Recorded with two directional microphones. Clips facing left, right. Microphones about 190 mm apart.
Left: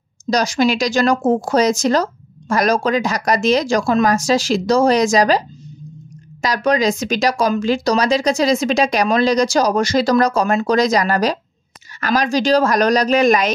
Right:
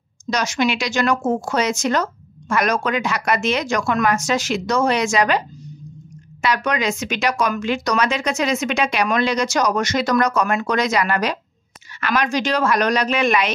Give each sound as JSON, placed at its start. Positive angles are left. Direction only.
{"t": 0.3, "sound": "speech", "side_deg": 35}
{"t": 6.4, "sound": "speech", "side_deg": 35}